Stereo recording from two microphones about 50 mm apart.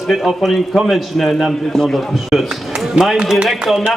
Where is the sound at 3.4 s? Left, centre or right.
Centre.